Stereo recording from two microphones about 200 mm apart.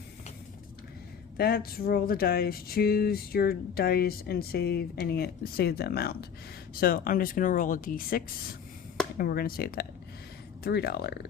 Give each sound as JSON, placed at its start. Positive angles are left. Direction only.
{"t": 1.4, "sound": "speech", "side_deg": 50}